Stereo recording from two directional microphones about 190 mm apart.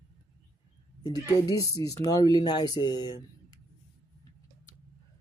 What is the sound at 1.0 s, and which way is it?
Speech, 20° left (ahead or behind).